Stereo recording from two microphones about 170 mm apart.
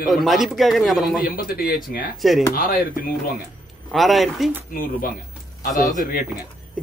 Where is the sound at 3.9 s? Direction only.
Centre (ahead or behind).